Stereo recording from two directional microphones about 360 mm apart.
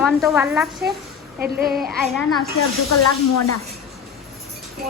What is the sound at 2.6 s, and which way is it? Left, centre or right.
Speech, left.